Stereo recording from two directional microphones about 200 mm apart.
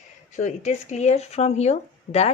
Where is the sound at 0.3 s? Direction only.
40° left (ahead or behind).